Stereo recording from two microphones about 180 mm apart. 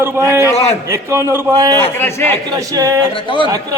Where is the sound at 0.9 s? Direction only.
15° right (ahead or behind).